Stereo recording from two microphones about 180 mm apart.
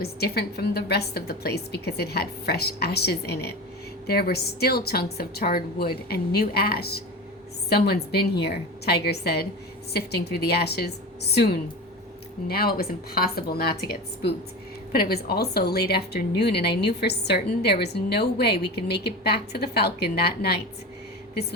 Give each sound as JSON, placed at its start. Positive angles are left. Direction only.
{"t": 0.0, "sound": "speech", "side_deg": 60}
{"t": 14.9, "sound": "speech", "side_deg": 60}